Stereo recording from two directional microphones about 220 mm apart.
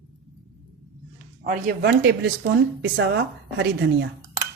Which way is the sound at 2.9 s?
60° right (ahead or behind).